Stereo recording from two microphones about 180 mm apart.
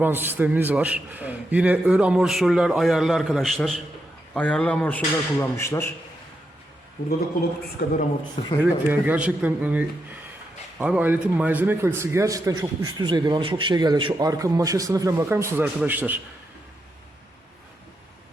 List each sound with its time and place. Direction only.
0.0 s a man's voice: 10° right (ahead or behind); by 5.9 s 15° left (ahead or behind)
7.8 s a man's voice: 65° left (ahead or behind)
8.6 s a man's voice: 10° right (ahead or behind)